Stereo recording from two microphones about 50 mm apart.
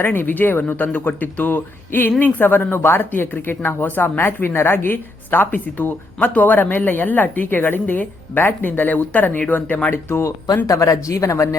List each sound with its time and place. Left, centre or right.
0.0 s a woman's voice: left
9.9 s speech: left
10.8 s speech: left